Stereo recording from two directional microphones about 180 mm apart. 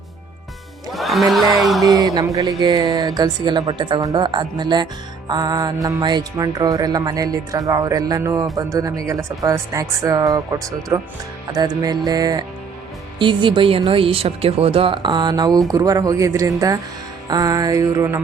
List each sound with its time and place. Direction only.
0.9 s speech: centre (ahead or behind)
1.8 s speech: 20° right (ahead or behind)